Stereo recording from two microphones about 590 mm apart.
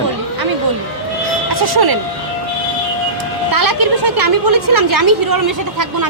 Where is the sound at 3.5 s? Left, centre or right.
Right.